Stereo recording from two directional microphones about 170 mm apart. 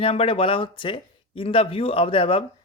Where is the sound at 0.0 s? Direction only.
35° left (ahead or behind).